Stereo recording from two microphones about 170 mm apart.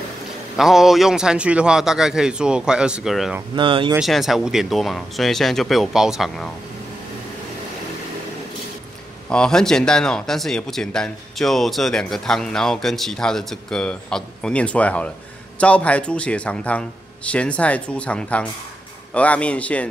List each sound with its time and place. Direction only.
0.6 s speech: centre (ahead or behind)
3.5 s speech: 30° right (ahead or behind)
4.0 s speech: centre (ahead or behind)
9.3 s a man's voice: 5° left (ahead or behind)